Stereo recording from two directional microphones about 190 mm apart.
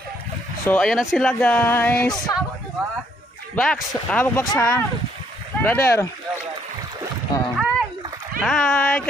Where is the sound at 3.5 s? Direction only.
5° left (ahead or behind).